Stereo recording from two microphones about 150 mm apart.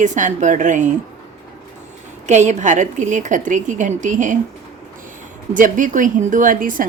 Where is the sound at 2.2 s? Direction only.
50° right (ahead or behind).